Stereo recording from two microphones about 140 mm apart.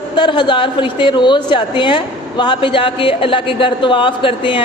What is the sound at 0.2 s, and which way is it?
A woman's voice, 35° left (ahead or behind).